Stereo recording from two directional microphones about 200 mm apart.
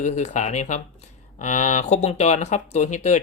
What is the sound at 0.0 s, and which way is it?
Speech, 35° left (ahead or behind).